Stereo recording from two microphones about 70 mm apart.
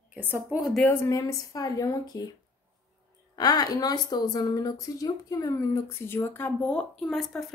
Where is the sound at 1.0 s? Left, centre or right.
Left.